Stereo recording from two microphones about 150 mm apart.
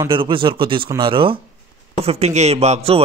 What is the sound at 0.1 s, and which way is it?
Speech, 35° right (ahead or behind).